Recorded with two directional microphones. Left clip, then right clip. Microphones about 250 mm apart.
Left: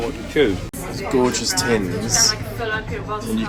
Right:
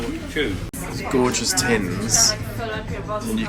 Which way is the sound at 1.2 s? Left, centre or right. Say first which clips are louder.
Left 1 dB; centre.